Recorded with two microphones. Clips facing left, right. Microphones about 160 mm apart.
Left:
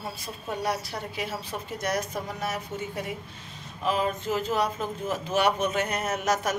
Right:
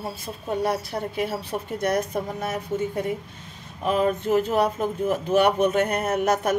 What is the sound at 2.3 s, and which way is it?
A woman's voice, 50° right (ahead or behind).